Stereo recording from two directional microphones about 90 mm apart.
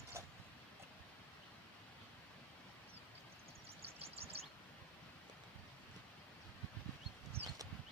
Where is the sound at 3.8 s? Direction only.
90° right.